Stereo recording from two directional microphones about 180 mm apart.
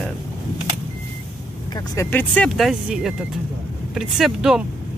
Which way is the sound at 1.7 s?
15° left (ahead or behind).